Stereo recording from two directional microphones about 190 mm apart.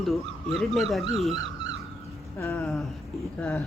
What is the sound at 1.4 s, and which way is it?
Crow, 80° right.